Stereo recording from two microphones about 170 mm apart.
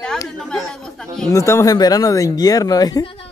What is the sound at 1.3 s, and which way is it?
Speech, 15° left (ahead or behind).